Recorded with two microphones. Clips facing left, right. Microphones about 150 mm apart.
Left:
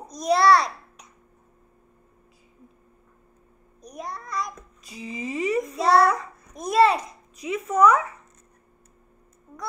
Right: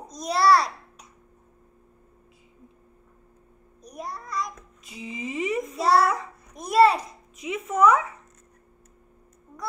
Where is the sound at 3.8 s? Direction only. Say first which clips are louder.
Left 1 dB; 5° right (ahead or behind).